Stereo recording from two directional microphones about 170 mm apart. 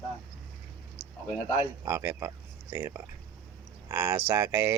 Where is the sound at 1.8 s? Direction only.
15° right (ahead or behind).